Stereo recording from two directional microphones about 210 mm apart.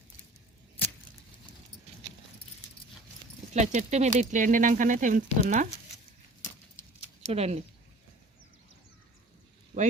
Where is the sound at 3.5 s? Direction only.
35° right (ahead or behind).